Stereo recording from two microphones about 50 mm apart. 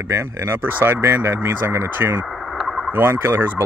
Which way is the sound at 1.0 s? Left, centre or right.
Right.